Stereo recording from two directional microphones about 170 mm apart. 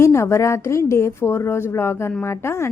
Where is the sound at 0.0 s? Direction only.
15° left (ahead or behind).